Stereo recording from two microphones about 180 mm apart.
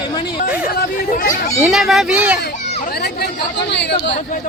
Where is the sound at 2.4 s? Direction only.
60° left (ahead or behind).